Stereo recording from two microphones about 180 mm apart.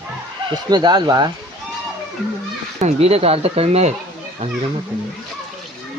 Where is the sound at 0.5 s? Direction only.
25° right (ahead or behind).